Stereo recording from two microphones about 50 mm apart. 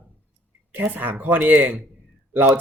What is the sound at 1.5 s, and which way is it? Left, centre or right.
Speech, centre.